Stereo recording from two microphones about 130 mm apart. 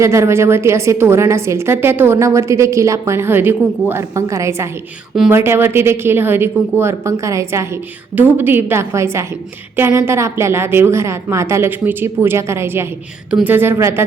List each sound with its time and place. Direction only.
0.0 s a woman's voice: 20° right (ahead or behind)